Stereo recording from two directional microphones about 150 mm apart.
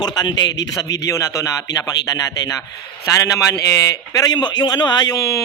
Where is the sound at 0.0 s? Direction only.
30° left (ahead or behind).